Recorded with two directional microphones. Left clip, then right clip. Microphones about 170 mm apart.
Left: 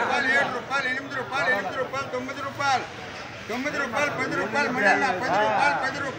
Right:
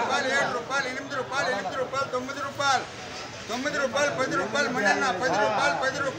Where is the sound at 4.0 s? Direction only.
15° right (ahead or behind).